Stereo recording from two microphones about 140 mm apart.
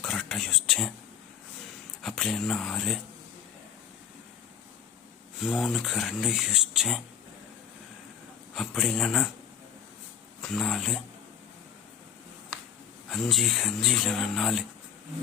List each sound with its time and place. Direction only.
0.0 s whispering: 5° left (ahead or behind)
2.0 s speech: centre (ahead or behind)
5.4 s speech: centre (ahead or behind)
8.5 s speech: centre (ahead or behind)
10.4 s speech: centre (ahead or behind)
13.1 s speech: centre (ahead or behind)